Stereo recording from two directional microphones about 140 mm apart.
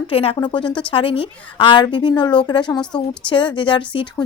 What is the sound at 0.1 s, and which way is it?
A woman's voice, 40° left (ahead or behind).